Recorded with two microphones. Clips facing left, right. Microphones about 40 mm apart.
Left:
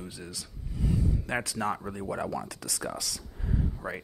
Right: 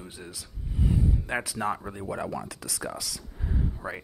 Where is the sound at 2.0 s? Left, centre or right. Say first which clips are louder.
Even; centre.